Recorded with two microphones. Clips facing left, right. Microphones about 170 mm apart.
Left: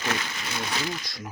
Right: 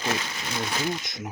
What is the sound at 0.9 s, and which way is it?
Speech, 20° right (ahead or behind).